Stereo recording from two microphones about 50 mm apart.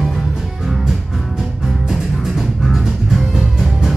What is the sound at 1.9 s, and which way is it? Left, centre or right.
Music, centre.